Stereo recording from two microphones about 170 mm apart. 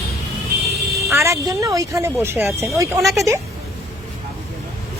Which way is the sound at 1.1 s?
15° right (ahead or behind).